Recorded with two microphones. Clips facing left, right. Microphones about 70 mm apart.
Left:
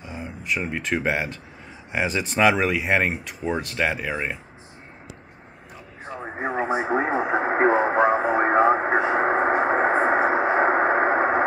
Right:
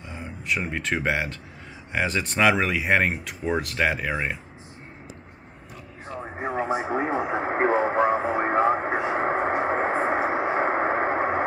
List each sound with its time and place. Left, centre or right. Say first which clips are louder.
0.0 s speech: left 2 dB; centre
6.2 s radio: left 2 dB; left